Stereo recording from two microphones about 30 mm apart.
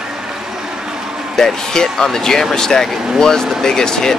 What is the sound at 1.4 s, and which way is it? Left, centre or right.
Speech, centre.